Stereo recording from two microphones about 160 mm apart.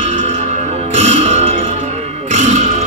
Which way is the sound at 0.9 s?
40° right (ahead or behind).